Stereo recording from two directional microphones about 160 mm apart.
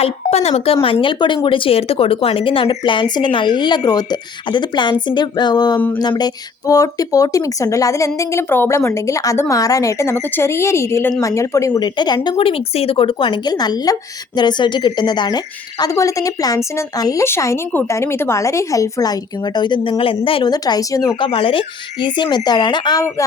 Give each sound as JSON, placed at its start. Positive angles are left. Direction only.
{"t": 0.0, "sound": "speech", "side_deg": 40}